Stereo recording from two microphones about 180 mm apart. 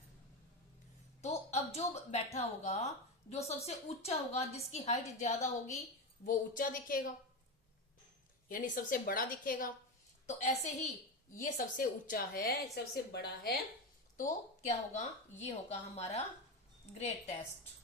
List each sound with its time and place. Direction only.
1.2 s a woman's voice: 35° left (ahead or behind)
8.4 s a woman's voice: 50° left (ahead or behind)
10.2 s a woman's voice: 40° left (ahead or behind); by 13.6 s 60° left (ahead or behind)
14.2 s speech: 40° left (ahead or behind)